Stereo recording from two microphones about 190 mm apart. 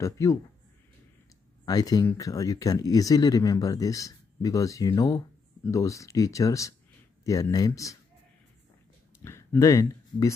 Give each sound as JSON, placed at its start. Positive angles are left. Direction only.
{"t": 0.0, "sound": "speech", "side_deg": 15}
{"t": 1.7, "sound": "speech", "side_deg": 20}
{"t": 9.2, "sound": "speech", "side_deg": 15}